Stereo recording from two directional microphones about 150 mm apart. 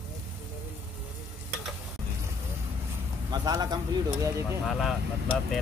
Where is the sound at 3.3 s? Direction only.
25° right (ahead or behind).